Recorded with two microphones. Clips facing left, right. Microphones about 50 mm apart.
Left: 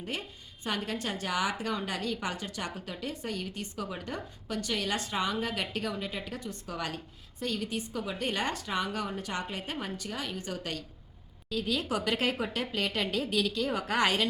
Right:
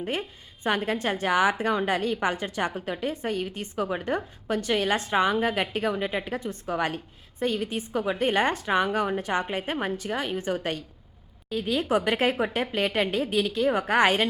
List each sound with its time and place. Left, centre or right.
0.0 s a woman's voice: right